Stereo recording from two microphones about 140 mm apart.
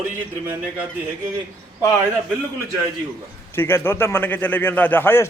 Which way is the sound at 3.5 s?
15° left (ahead or behind).